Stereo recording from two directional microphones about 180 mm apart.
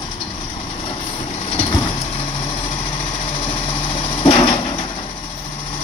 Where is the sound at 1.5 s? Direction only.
35° left (ahead or behind).